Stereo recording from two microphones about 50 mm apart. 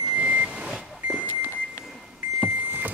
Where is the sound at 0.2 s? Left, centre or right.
Right.